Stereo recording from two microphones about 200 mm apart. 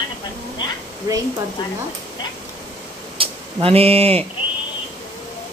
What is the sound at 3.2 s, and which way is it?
Speech, 30° right (ahead or behind).